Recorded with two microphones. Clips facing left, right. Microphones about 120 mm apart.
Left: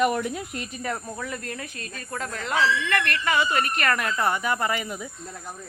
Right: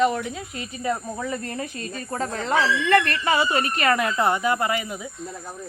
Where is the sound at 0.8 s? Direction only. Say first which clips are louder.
Right 6 dB; 15° right (ahead or behind).